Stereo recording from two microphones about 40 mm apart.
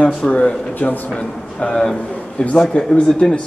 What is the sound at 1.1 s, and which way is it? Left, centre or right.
A man's voice, left.